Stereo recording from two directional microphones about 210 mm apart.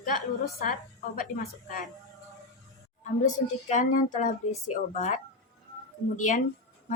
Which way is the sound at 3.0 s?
35° left (ahead or behind).